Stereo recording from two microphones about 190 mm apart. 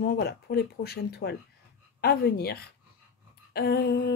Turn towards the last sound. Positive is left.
turn(degrees=60)  # may be behind; listen again after turning